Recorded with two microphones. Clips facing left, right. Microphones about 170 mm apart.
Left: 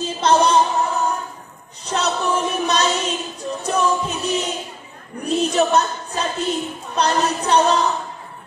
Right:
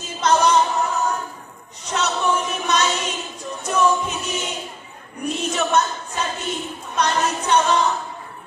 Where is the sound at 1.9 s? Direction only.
35° left (ahead or behind).